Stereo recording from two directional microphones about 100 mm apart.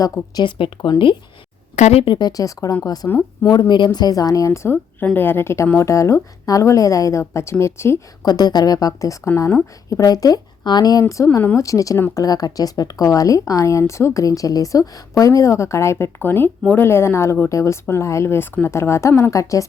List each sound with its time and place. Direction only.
0.0 s speech: 35° left (ahead or behind)
0.4 s speech: 50° left (ahead or behind)
1.9 s speech: 90° left
2.1 s speech: 40° left (ahead or behind)
8.2 s speech: 40° left (ahead or behind)
11.1 s speech: 30° left (ahead or behind)